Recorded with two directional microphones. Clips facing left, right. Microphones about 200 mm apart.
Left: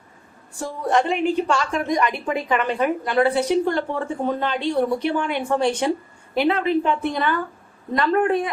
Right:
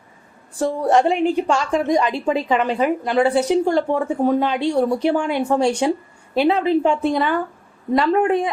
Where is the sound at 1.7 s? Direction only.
25° right (ahead or behind).